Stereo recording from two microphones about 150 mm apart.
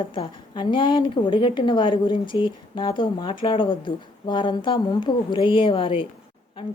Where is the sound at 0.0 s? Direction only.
35° left (ahead or behind).